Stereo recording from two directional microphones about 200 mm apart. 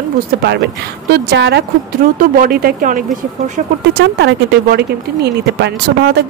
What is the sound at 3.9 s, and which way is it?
Speech, 60° right (ahead or behind).